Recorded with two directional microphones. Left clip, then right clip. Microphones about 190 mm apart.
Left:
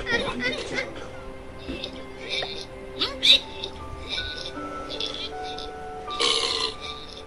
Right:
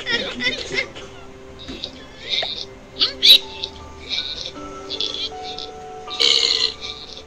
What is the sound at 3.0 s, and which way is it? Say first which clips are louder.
Music: right 7 dB; 20° left (ahead or behind).